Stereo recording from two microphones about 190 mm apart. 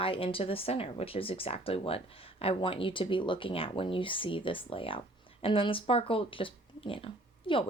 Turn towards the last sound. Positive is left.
turn(degrees=25)  # may be behind; listen again after turning